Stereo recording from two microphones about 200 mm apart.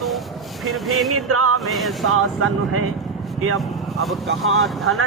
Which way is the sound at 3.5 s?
Centre (ahead or behind).